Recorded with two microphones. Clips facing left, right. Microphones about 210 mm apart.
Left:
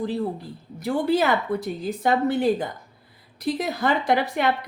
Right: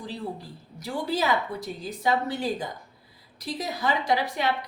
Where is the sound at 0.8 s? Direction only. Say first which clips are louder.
Left 6 dB; 55° left (ahead or behind).